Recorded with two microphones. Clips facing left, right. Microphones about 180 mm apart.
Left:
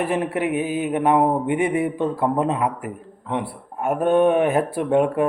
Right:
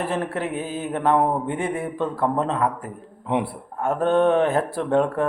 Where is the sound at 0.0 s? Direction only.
15° left (ahead or behind).